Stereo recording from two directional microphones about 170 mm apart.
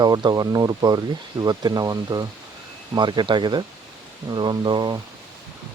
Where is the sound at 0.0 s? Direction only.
25° right (ahead or behind).